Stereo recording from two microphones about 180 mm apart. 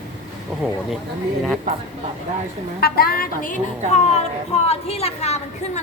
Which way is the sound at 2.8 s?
55° left (ahead or behind).